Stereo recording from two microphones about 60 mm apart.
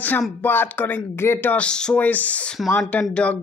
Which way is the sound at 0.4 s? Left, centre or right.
Left.